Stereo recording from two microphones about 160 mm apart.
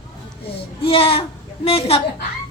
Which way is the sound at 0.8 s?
35° left (ahead or behind).